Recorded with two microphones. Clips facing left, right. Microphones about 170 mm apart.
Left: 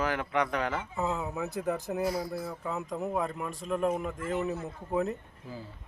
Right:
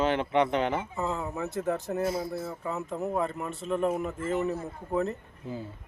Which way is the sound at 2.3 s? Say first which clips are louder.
Right 1 dB; centre (ahead or behind).